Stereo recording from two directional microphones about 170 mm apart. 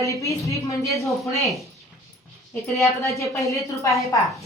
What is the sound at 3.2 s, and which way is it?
Speech, 15° left (ahead or behind).